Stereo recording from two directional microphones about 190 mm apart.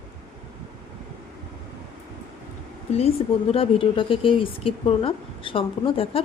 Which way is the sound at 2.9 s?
30° left (ahead or behind).